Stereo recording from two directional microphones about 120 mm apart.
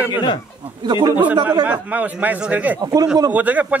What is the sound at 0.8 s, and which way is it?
Speech, 35° right (ahead or behind).